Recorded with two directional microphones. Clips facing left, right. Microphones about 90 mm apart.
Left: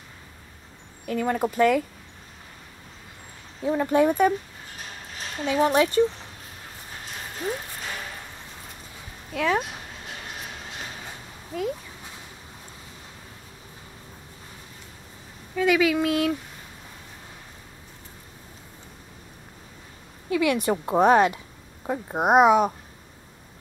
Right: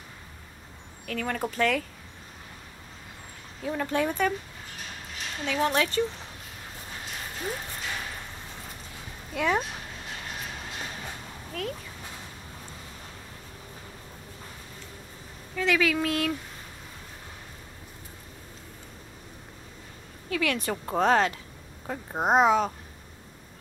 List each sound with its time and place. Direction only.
1.0 s a woman's voice: 20° left (ahead or behind)
3.6 s a woman's voice: 15° left (ahead or behind)
5.4 s a woman's voice: 15° left (ahead or behind)
9.3 s speech: 5° right (ahead or behind)
11.5 s a woman's voice: 15° left (ahead or behind)
15.5 s a woman's voice: 10° left (ahead or behind)
20.2 s a woman's voice: 15° left (ahead or behind)